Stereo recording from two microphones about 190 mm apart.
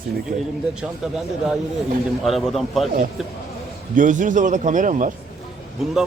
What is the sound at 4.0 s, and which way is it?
A man's voice, 40° right (ahead or behind).